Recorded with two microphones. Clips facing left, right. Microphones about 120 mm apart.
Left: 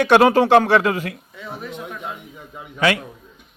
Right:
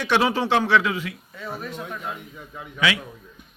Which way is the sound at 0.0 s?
55° left (ahead or behind).